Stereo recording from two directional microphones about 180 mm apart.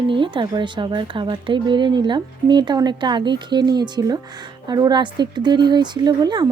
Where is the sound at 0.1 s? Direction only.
25° right (ahead or behind).